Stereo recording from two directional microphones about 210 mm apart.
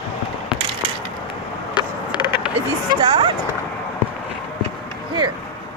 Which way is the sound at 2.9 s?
25° right (ahead or behind).